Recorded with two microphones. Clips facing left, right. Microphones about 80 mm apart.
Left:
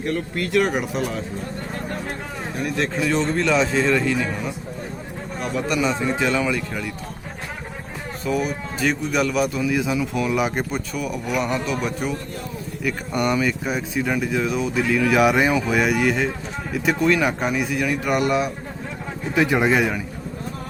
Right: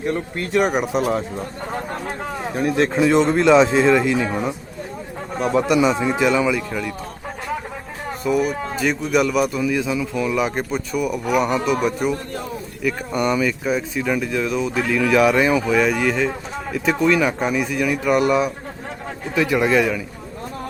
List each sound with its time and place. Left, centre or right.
0.0 s speech: right
2.7 s speech: right
5.5 s a man's voice: centre
8.8 s speech: centre
9.8 s speech: centre
19.3 s speech: left